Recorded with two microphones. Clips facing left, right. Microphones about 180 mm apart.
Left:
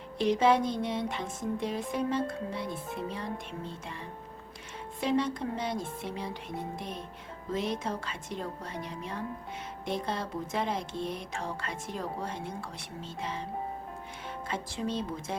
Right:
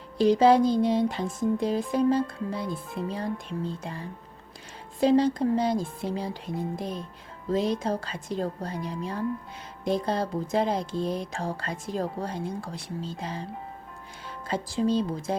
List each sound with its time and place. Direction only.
0.2 s speech: 35° right (ahead or behind)